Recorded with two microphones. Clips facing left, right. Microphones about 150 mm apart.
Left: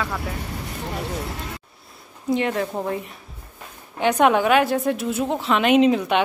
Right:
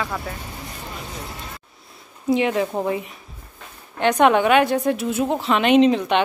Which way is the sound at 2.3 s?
5° right (ahead or behind).